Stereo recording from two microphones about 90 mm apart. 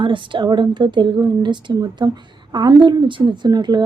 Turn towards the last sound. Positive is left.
turn(degrees=-50)  # may be behind; listen again after turning